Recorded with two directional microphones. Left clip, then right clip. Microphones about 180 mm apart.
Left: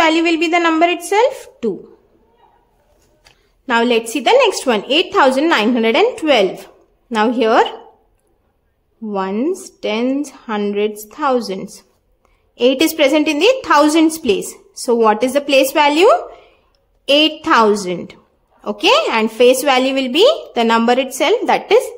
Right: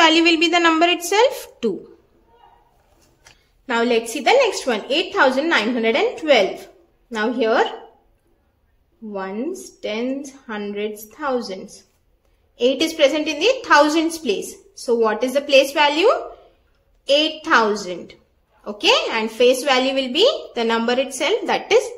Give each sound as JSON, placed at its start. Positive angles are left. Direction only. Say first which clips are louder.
{"t": 0.0, "sound": "a woman's voice", "louder": "left 1 dB", "side_deg": 20}
{"t": 3.6, "sound": "a woman's voice", "louder": "left 4 dB", "side_deg": 40}
{"t": 9.1, "sound": "a woman's voice", "louder": "left 8 dB", "side_deg": 50}